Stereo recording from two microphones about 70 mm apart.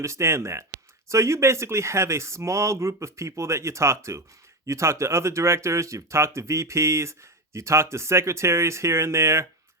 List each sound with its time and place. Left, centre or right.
0.0 s speech: right